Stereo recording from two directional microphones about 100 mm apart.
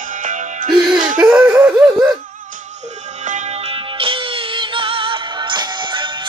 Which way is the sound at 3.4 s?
85° right.